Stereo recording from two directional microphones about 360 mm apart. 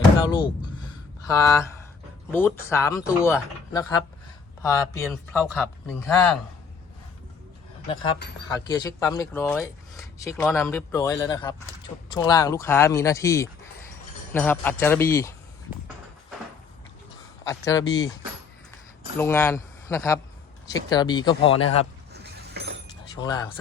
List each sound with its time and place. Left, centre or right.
0.3 s speech: centre
8.5 s speech: centre
17.4 s speech: centre
19.2 s speech: centre
22.1 s mechanisms: right
23.1 s speech: centre